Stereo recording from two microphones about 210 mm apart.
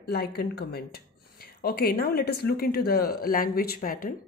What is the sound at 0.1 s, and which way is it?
Speech, 50° left (ahead or behind).